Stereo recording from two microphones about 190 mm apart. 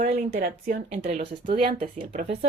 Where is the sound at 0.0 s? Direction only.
40° right (ahead or behind).